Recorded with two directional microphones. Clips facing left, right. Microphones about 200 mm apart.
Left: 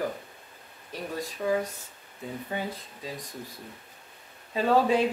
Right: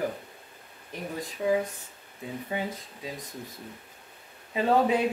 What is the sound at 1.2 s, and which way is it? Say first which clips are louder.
Speech: right 2 dB; 15° right (ahead or behind).